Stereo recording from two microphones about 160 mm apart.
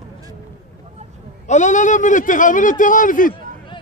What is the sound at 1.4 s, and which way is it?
A man's voice, 50° left (ahead or behind).